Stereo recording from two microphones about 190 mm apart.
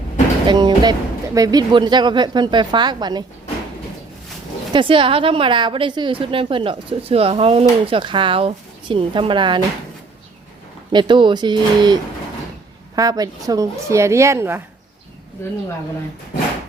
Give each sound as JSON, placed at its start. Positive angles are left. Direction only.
{"t": 0.4, "sound": "a woman's voice", "side_deg": -25}
{"t": 4.7, "sound": "a woman's voice", "side_deg": -25}
{"t": 10.9, "sound": "a woman's voice", "side_deg": -25}
{"t": 13.0, "sound": "a woman's voice", "side_deg": -20}